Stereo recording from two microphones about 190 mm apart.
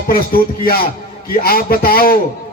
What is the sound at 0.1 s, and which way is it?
A man's voice, 50° left (ahead or behind).